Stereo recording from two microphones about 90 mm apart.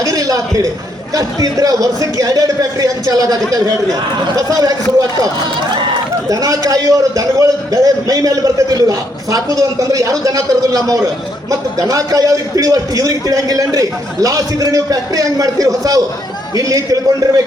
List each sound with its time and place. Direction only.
0.0 s a sound: 40° right (ahead or behind)
1.1 s a man's voice: 40° right (ahead or behind)
6.2 s a man's voice: 40° right (ahead or behind)